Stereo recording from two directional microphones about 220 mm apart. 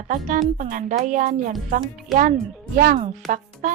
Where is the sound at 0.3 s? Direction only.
35° right (ahead or behind).